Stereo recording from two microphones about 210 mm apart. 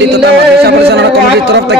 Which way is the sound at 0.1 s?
50° right (ahead or behind).